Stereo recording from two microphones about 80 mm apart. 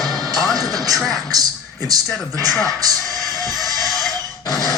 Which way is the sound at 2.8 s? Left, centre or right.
Right.